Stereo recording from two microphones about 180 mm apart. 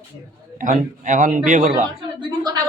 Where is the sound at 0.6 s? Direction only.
45° right (ahead or behind).